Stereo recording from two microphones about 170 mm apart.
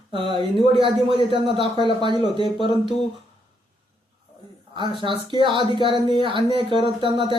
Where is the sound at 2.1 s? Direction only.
35° left (ahead or behind).